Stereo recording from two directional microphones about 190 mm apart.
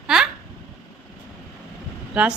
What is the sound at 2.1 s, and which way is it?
Speech, 5° right (ahead or behind).